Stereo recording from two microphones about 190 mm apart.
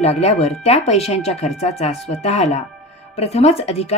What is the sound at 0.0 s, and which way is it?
Speech, 35° left (ahead or behind).